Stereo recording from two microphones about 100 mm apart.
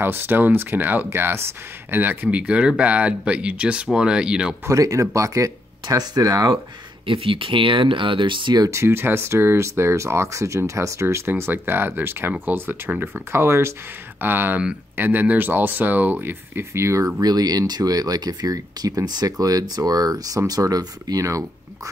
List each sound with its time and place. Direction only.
0.0 s speech: 20° right (ahead or behind)
4.6 s speech: 35° right (ahead or behind)
7.1 s speech: 60° right (ahead or behind)
8.6 s speech: 25° right (ahead or behind)
17.2 s speech: 40° right (ahead or behind)